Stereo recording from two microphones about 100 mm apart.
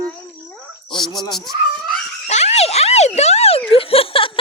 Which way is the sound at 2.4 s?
90° left.